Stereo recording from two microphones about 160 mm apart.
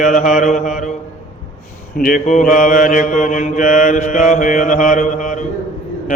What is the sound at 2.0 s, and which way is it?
Mantra, 60° left (ahead or behind).